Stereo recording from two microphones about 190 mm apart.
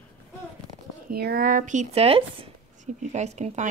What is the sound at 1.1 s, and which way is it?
Speech, 55° right (ahead or behind).